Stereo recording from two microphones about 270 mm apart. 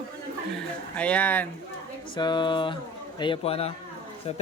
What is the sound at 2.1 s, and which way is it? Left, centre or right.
A man's voice, centre.